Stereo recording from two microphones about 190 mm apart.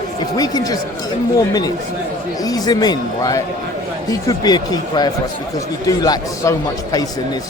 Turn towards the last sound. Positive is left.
turn(degrees=20)  # may be behind; listen again after turning